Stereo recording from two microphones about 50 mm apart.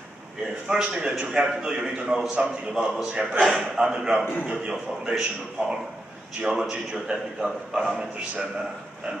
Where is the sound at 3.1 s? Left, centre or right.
Centre.